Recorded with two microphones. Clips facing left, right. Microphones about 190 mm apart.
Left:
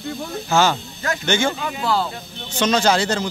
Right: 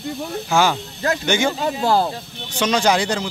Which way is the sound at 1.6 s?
40° right (ahead or behind).